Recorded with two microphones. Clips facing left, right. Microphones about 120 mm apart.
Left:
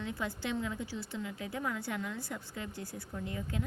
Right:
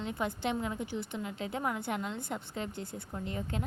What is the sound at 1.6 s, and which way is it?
Speech, 55° right (ahead or behind).